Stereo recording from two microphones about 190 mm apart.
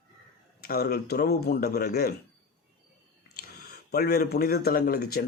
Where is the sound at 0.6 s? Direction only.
55° left (ahead or behind).